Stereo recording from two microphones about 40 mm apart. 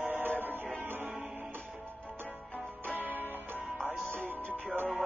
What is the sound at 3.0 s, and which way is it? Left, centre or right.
Music, right.